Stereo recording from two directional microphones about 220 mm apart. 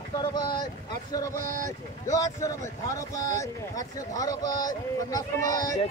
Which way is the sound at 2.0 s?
15° left (ahead or behind).